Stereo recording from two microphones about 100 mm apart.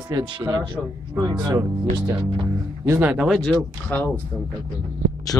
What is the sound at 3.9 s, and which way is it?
Speech, 15° left (ahead or behind).